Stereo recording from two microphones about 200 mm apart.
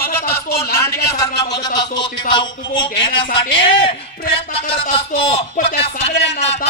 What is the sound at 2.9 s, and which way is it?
Speech, 65° left (ahead or behind).